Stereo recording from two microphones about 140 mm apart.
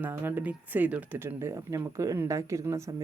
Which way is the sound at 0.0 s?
15° right (ahead or behind).